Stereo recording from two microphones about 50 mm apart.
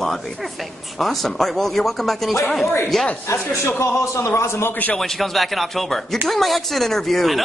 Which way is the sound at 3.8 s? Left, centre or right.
Left.